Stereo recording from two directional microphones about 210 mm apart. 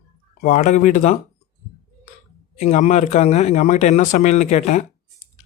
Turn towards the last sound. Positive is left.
turn(degrees=35)  # may be behind; listen again after turning